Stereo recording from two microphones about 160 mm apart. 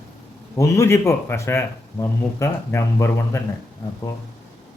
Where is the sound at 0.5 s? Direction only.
20° left (ahead or behind).